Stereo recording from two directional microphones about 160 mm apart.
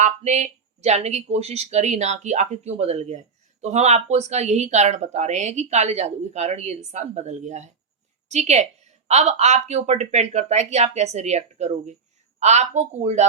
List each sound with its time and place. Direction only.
0.0 s speech: 45° right (ahead or behind)